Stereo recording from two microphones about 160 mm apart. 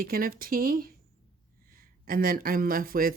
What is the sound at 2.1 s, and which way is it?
Speech, 65° right (ahead or behind).